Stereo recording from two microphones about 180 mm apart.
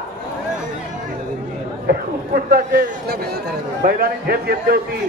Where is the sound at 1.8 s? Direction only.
55° right (ahead or behind).